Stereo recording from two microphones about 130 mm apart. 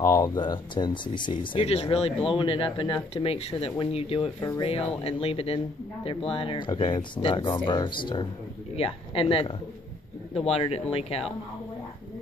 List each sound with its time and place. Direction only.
0.0 s speech: 30° left (ahead or behind); by 11.2 s 50° left (ahead or behind)